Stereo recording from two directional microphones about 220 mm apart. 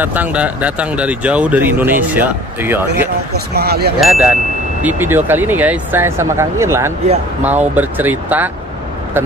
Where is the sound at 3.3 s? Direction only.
45° right (ahead or behind).